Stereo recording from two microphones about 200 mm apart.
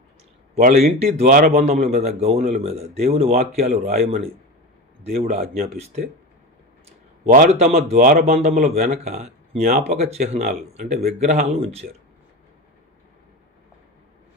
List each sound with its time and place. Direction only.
0.5 s speech: 35° right (ahead or behind)
4.0 s speech: 50° right (ahead or behind)
7.3 s speech: 40° right (ahead or behind)
8.7 s speech: 35° right (ahead or behind)